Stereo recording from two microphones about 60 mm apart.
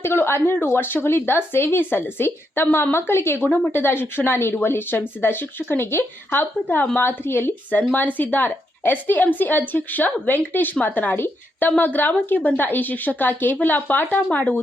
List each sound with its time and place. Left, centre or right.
0.0 s a woman's voice: left